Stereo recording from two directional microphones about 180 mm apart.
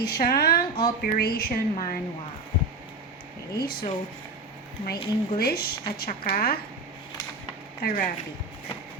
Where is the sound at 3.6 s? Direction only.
60° left (ahead or behind).